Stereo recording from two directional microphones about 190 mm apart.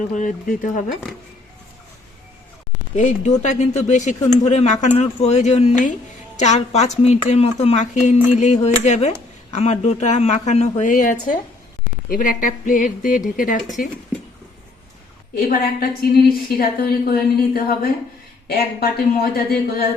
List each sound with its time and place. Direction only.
0.1 s speech: 40° left (ahead or behind)
2.9 s a woman's voice: 40° left (ahead or behind)
15.4 s speech: 50° left (ahead or behind)